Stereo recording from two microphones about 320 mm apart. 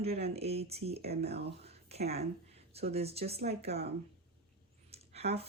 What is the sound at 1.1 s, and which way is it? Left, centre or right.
Speech, right.